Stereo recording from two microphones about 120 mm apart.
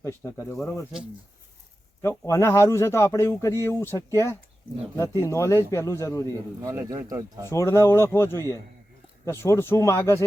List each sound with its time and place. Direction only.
0.0 s speech: 25° left (ahead or behind)
2.0 s speech: 25° left (ahead or behind)
6.3 s speech: 25° right (ahead or behind)
7.5 s speech: 25° left (ahead or behind)